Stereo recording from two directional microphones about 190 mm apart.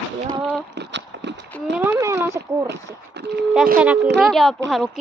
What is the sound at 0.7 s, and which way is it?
Horse, 65° right (ahead or behind).